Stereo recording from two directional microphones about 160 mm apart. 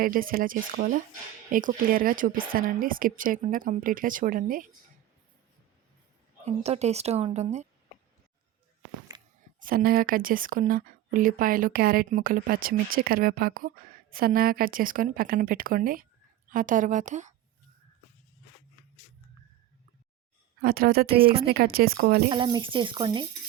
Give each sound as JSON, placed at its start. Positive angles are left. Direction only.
{"t": 0.0, "sound": "speech", "side_deg": -60}
{"t": 6.4, "sound": "a woman's voice", "side_deg": -45}
{"t": 9.1, "sound": "a sound", "side_deg": -30}
{"t": 9.6, "sound": "a woman's voice", "side_deg": -60}
{"t": 20.6, "sound": "speech", "side_deg": -65}
{"t": 22.3, "sound": "speech", "side_deg": -30}